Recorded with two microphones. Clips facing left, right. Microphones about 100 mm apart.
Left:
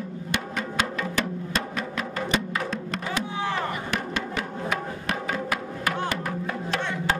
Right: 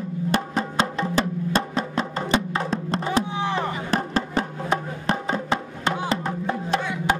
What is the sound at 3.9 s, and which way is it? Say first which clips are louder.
Music: right 5 dB; 35° right (ahead or behind).